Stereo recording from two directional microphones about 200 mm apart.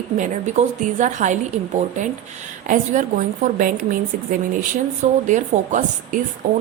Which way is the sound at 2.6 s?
40° right (ahead or behind).